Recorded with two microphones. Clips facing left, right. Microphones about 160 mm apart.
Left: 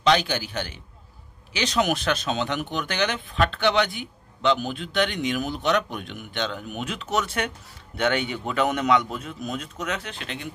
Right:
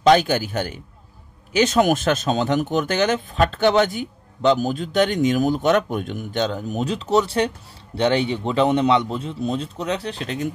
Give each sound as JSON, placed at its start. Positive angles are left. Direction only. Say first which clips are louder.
{"t": 0.0, "sound": "a man's voice", "louder": "right 6 dB", "side_deg": -45}